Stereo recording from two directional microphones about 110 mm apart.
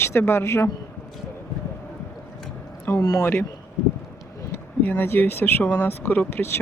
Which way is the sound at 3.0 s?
35° left (ahead or behind).